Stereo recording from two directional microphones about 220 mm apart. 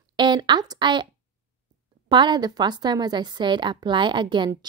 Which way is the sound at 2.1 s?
20° right (ahead or behind).